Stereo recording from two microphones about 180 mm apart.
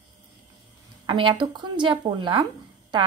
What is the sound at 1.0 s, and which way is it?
A woman's voice, 25° right (ahead or behind).